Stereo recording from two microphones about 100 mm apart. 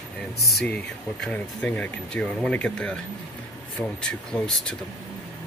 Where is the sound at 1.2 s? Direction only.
15° left (ahead or behind).